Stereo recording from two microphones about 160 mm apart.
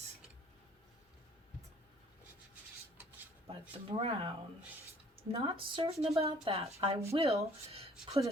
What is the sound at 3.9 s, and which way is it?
Speech, 35° right (ahead or behind).